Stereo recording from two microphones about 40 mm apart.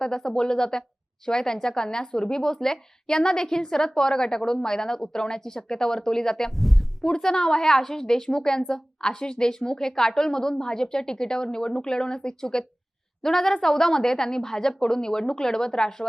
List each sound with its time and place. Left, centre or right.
0.0 s a woman's voice: centre
6.6 s speech: centre
7.0 s a woman's voice: centre